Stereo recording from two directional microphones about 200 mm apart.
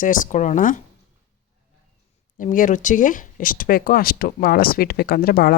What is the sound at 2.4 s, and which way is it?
Speech, 40° left (ahead or behind).